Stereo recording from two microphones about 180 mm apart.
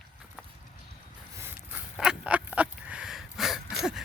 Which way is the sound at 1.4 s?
10° right (ahead or behind).